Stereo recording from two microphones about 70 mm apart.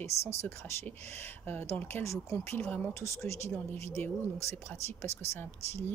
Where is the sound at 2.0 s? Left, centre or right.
Left.